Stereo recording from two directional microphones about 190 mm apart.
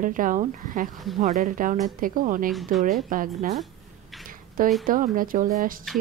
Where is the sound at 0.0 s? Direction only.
45° right (ahead or behind).